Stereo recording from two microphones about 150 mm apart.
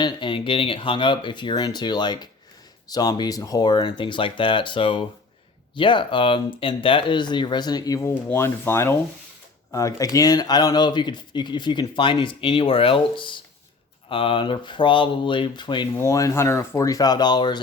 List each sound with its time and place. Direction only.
0.0 s speech: 35° left (ahead or behind)
16.0 s speech: 20° left (ahead or behind)